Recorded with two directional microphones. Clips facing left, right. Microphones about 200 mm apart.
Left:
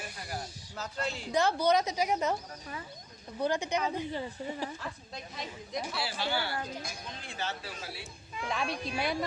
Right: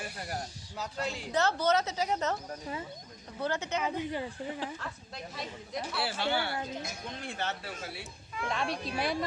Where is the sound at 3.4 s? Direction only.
15° left (ahead or behind).